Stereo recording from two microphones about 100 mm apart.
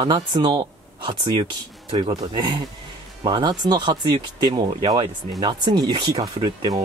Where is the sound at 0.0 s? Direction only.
50° right (ahead or behind).